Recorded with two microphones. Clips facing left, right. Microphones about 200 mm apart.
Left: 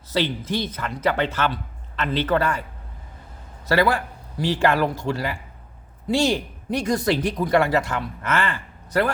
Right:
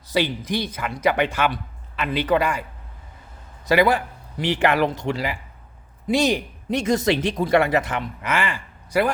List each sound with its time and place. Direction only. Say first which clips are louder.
0.1 s speech: right 1 dB; 15° right (ahead or behind)
3.7 s speech: right 2 dB; 20° right (ahead or behind)